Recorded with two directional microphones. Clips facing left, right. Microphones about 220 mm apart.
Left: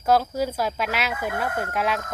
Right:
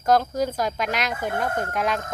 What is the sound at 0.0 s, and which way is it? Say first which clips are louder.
Speech: right 1 dB; 5° left (ahead or behind).